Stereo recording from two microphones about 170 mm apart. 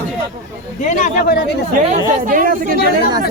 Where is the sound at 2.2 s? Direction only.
55° right (ahead or behind).